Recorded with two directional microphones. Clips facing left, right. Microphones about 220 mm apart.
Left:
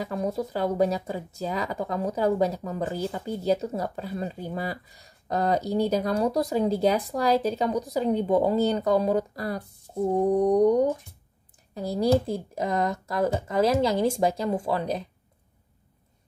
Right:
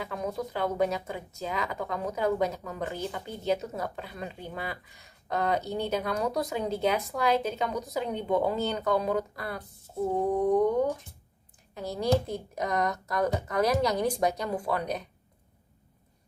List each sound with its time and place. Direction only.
0.0 s a woman's voice: 35° left (ahead or behind)